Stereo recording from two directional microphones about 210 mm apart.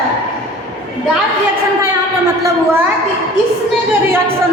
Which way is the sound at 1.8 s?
15° right (ahead or behind).